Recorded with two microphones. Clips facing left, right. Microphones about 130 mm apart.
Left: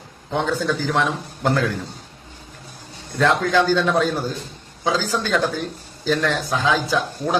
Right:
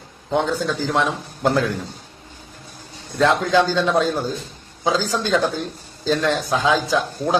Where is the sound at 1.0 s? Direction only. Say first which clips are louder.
Right 1 dB; 10° right (ahead or behind).